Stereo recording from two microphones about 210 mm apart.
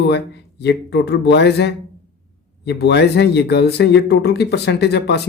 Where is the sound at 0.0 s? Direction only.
55° left (ahead or behind).